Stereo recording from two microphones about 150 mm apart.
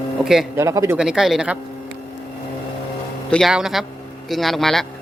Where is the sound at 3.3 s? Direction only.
Centre (ahead or behind).